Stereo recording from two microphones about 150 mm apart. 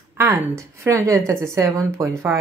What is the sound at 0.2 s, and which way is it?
A woman's voice, 20° right (ahead or behind).